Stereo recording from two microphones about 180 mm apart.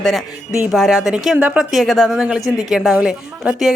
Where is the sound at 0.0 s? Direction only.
Centre (ahead or behind).